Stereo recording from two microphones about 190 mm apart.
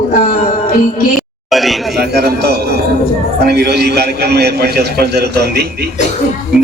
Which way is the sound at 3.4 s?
55° right (ahead or behind).